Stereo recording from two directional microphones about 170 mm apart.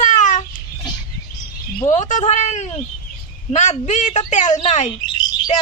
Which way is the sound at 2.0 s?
45° left (ahead or behind).